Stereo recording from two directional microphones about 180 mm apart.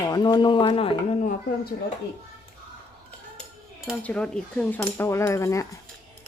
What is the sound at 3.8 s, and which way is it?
Speech, centre (ahead or behind).